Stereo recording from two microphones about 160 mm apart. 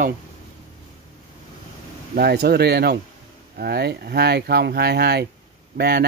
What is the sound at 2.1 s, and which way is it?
Speech, 85° right.